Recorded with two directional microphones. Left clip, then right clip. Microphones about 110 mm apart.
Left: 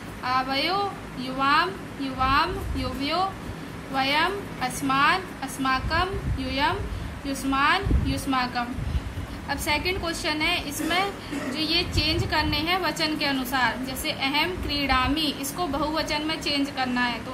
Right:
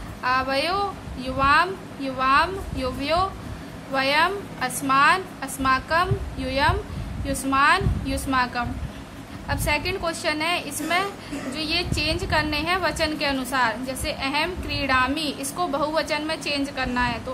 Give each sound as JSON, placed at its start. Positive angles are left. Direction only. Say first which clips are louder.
{"t": 0.2, "sound": "a woman's voice", "louder": "right 2 dB", "side_deg": -60}